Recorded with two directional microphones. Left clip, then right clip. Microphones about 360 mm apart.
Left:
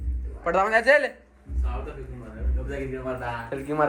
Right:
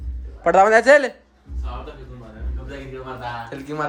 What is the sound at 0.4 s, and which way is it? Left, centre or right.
Speech, centre.